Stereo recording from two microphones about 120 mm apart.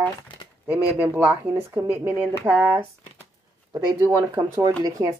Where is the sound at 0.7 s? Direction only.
20° right (ahead or behind).